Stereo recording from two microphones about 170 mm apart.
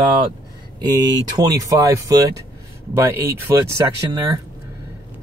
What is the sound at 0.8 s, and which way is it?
Speech, 20° right (ahead or behind).